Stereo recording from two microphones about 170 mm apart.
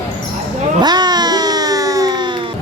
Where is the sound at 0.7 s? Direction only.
25° right (ahead or behind).